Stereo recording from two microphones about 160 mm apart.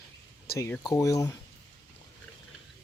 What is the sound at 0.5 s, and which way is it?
Speech, 15° left (ahead or behind).